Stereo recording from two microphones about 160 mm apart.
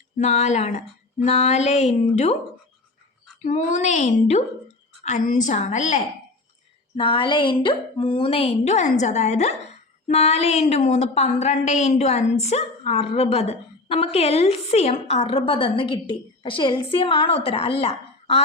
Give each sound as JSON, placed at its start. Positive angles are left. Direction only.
{"t": 0.2, "sound": "speech", "side_deg": 45}
{"t": 3.4, "sound": "speech", "side_deg": 50}
{"t": 6.9, "sound": "speech", "side_deg": 30}